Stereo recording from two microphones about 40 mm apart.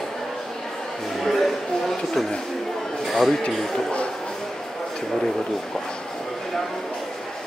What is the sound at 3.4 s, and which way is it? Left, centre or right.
Speech, left.